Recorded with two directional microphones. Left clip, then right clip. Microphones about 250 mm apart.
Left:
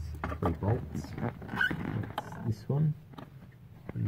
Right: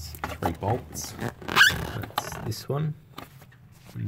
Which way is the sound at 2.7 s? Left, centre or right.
Right.